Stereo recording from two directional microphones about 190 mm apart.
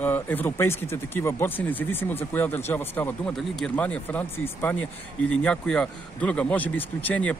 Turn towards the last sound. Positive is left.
turn(degrees=10)  # may be behind; listen again after turning